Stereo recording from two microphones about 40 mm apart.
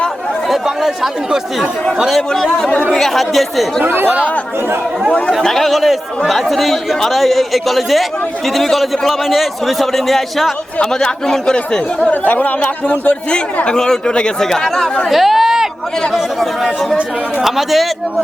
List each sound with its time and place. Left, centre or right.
0.4 s speech: centre
2.3 s speech: centre
3.8 s speech: right
5.4 s speech: centre
10.8 s speech: centre
12.1 s speech: left
13.7 s speech: centre
15.1 s a sound: centre
17.4 s speech: centre